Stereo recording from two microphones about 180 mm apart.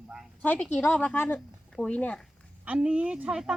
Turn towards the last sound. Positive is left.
turn(degrees=-5)  # may be behind; listen again after turning